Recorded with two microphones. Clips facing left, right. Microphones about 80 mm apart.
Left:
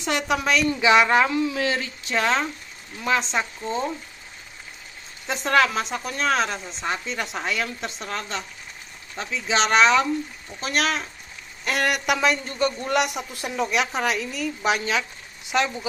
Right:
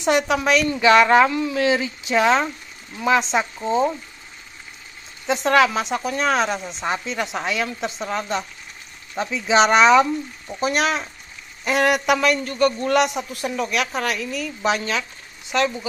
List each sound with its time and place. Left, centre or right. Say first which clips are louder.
0.3 s speech: right 3 dB; centre
1.0 s speech: right 4 dB; centre
1.7 s speech: right 6 dB; centre
5.2 s speech: right 3 dB; centre
7.1 s speech: right 3 dB; centre
12.2 s speech: right 3 dB; centre